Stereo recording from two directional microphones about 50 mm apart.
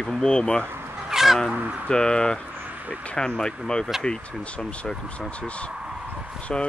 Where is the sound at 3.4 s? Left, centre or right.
Centre.